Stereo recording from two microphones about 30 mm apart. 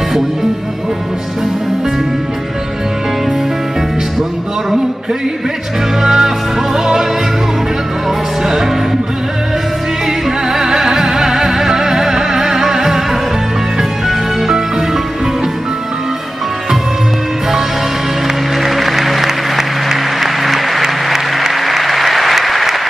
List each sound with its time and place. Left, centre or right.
6.0 s music: centre
10.5 s music: centre
18.6 s music: centre
20.8 s applause: centre